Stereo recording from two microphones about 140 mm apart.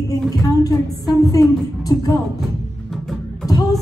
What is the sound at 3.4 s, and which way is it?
Music, 25° left (ahead or behind).